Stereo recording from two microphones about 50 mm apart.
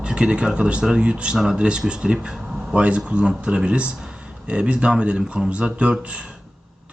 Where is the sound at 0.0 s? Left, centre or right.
Centre.